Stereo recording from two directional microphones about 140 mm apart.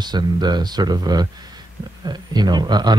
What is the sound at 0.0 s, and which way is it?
A woman's voice, 30° right (ahead or behind).